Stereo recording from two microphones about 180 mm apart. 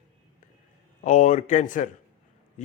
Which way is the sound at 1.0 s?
45° left (ahead or behind).